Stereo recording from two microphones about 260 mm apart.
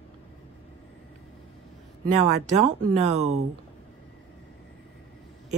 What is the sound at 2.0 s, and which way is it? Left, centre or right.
Speech, right.